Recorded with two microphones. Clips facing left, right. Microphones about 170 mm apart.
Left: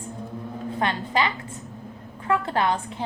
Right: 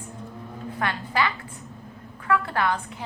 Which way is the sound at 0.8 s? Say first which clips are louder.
Left 2 dB; 20° left (ahead or behind).